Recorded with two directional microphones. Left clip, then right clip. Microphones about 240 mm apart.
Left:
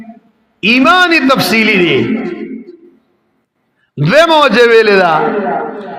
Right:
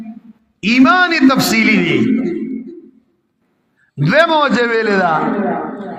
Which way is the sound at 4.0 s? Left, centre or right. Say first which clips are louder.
Left 4 dB; left.